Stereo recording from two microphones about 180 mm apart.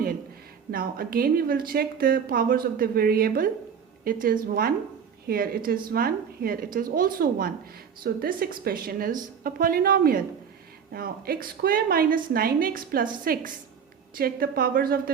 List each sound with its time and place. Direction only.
0.7 s a woman's voice: 55° right (ahead or behind)